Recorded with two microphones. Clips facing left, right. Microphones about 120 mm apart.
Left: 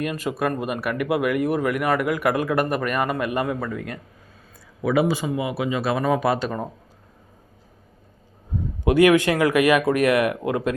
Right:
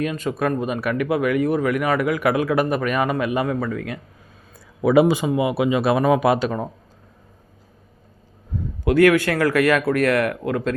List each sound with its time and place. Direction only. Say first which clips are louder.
0.0 s speech: right 2 dB; 5° left (ahead or behind)
4.8 s speech: right 5 dB; 20° right (ahead or behind)
8.8 s speech: right 1 dB; 20° left (ahead or behind)